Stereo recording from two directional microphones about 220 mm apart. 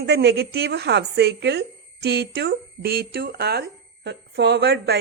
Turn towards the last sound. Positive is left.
turn(degrees=-45)  # may be behind; listen again after turning